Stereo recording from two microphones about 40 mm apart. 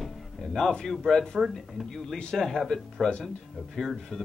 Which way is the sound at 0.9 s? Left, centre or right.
Centre.